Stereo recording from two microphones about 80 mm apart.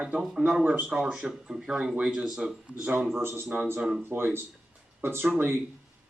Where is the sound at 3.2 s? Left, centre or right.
Right.